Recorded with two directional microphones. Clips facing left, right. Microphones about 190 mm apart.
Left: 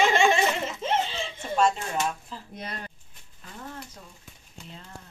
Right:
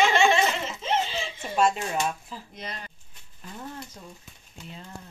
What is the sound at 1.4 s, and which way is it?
Speech, 10° right (ahead or behind).